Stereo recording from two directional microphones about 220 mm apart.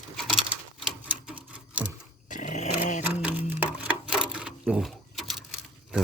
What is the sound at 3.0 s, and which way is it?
Sewing machine, 5° right (ahead or behind).